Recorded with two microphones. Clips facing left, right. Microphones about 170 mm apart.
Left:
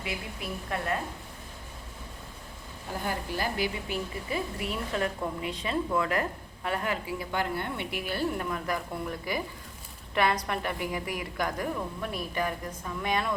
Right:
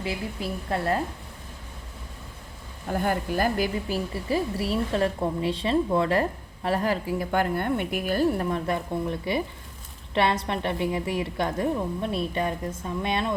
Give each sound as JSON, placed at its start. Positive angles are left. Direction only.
{"t": 0.0, "sound": "speech", "side_deg": -30}
{"t": 3.0, "sound": "a woman's voice", "side_deg": -50}